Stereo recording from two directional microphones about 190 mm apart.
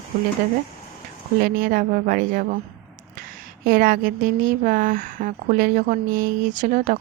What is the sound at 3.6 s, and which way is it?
A woman's voice, 45° right (ahead or behind).